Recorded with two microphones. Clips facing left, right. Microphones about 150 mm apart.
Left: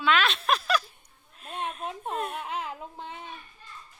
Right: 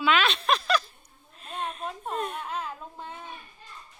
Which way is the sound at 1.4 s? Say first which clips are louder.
Even; 5° left (ahead or behind).